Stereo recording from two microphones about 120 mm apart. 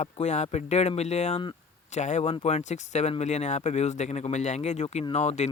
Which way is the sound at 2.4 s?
65° left (ahead or behind).